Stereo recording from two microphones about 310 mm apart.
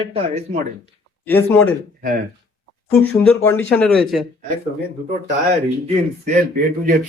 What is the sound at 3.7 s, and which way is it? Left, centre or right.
Speech, centre.